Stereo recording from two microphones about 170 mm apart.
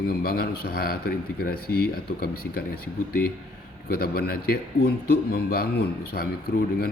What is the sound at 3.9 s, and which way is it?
Speech, 65° left (ahead or behind).